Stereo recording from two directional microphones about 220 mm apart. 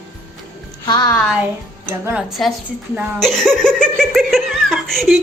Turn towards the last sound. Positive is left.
turn(degrees=0)  # may be behind; listen again after turning